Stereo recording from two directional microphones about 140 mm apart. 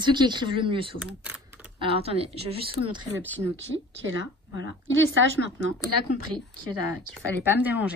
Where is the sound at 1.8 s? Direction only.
45° right (ahead or behind).